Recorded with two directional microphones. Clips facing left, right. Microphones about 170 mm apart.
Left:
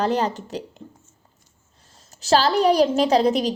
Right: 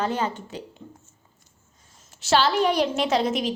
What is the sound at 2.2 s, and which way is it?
Speech, 35° left (ahead or behind).